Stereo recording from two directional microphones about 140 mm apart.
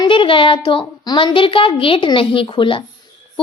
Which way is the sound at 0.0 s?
35° left (ahead or behind).